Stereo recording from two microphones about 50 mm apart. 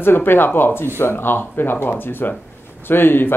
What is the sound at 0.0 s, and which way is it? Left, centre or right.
Speech, left.